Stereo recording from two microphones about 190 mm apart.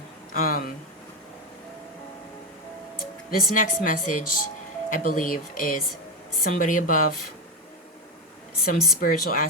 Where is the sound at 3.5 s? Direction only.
45° left (ahead or behind).